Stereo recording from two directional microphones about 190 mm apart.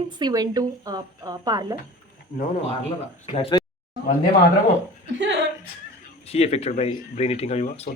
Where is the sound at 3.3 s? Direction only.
30° left (ahead or behind).